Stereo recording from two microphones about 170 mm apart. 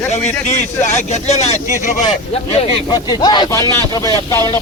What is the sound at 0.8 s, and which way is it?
Speech, 40° left (ahead or behind).